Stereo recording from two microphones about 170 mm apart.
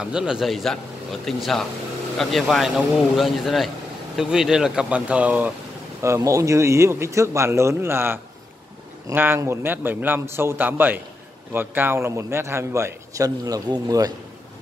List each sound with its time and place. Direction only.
0.0 s a man's voice: 5° right (ahead or behind); by 14.1 s 20° right (ahead or behind)